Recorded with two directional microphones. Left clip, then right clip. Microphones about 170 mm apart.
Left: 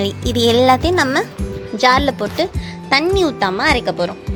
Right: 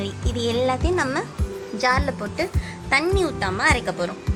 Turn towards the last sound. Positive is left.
turn(degrees=45)  # may be behind; listen again after turning